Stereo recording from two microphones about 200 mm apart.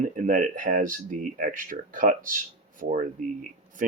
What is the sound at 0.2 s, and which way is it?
Speech, 40° right (ahead or behind).